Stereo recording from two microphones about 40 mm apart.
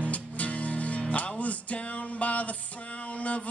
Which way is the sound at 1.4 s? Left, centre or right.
Left.